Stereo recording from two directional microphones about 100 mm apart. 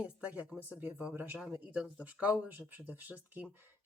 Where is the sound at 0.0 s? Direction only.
15° right (ahead or behind).